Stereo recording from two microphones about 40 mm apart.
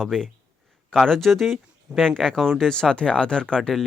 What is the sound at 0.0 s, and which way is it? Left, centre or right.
Speech, centre.